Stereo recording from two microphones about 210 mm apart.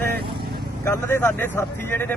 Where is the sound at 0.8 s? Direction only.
10° left (ahead or behind).